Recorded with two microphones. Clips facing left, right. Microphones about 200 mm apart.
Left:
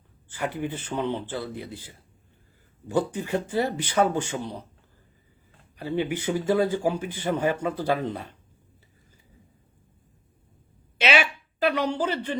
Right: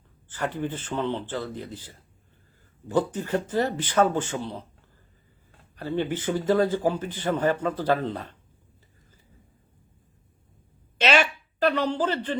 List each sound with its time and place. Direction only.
0.3 s speech: 10° left (ahead or behind)
5.7 s speech: 15° left (ahead or behind)
10.9 s a woman's voice: 10° left (ahead or behind)